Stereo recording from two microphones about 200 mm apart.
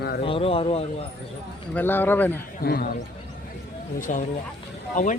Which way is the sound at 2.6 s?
50° left (ahead or behind).